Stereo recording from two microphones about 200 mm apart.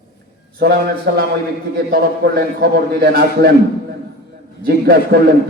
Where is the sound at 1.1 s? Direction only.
50° right (ahead or behind).